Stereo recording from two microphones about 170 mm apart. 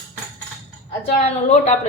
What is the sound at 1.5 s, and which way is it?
Speech, 40° left (ahead or behind).